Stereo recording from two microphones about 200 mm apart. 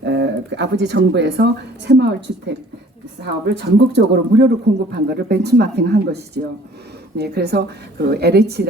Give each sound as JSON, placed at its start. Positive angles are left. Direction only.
{"t": 0.0, "sound": "speech", "side_deg": -60}
{"t": 3.5, "sound": "a man's voice", "side_deg": -60}